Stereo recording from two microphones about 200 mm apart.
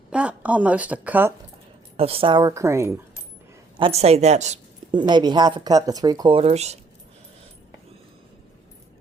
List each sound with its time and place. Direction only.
0.1 s a woman's voice: 5° right (ahead or behind)
2.0 s speech: 30° right (ahead or behind); by 3.0 s 15° right (ahead or behind)
3.8 s a woman's voice: 30° right (ahead or behind)
4.9 s speech: 20° right (ahead or behind)